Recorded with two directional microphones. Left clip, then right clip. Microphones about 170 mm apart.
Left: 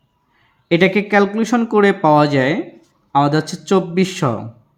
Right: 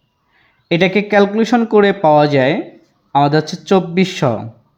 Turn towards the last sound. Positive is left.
turn(degrees=-20)  # may be behind; listen again after turning